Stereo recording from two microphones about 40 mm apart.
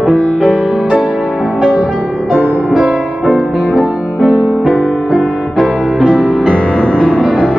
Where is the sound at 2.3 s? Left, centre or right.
Centre.